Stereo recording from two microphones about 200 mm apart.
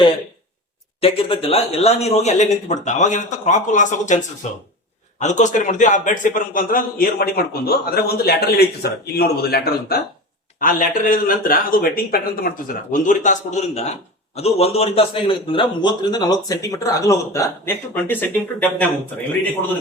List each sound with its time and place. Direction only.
1.0 s a man's voice: 30° left (ahead or behind); by 18.9 s 10° left (ahead or behind)